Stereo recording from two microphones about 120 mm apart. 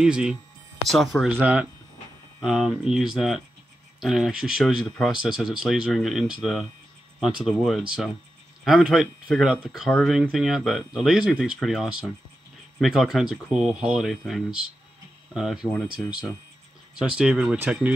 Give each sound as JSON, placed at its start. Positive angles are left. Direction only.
{"t": 0.0, "sound": "speech", "side_deg": -5}